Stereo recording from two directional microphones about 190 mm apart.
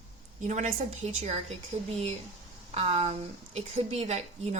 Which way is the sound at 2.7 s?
35° right (ahead or behind).